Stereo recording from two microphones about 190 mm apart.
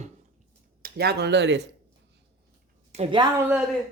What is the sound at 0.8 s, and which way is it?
Speech, 55° right (ahead or behind).